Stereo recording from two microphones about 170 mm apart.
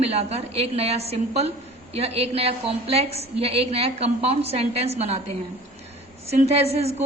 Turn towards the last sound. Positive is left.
turn(degrees=-35)  # may be behind; listen again after turning